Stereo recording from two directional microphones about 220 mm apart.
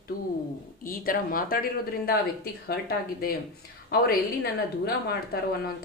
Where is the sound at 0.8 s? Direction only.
40° left (ahead or behind).